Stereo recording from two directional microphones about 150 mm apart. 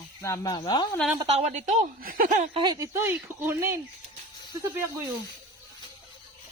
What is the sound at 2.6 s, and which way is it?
Speech, 25° right (ahead or behind).